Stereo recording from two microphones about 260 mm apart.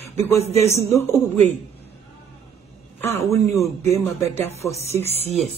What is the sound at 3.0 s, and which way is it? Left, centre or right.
Speech, centre.